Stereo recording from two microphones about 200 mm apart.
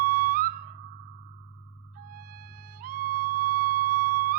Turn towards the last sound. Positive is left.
turn(degrees=-45)  # may be behind; listen again after turning